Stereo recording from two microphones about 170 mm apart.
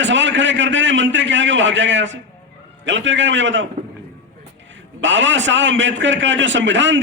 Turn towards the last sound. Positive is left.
turn(degrees=-90)